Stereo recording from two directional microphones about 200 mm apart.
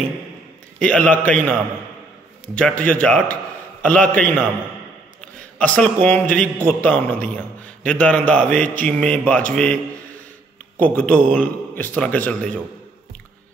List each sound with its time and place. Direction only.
0.8 s a man's voice: 5° left (ahead or behind)
5.2 s a sound: 5° left (ahead or behind)
6.0 s a man's voice: 5° left (ahead or behind)